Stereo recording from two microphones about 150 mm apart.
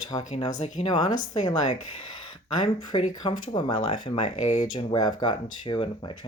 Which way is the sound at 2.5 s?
30° left (ahead or behind).